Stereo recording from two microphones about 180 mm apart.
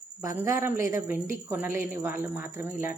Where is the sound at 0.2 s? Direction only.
15° right (ahead or behind).